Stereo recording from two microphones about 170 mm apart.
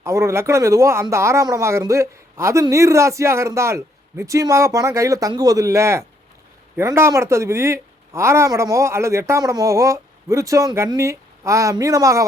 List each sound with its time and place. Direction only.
0.0 s speech: 15° right (ahead or behind)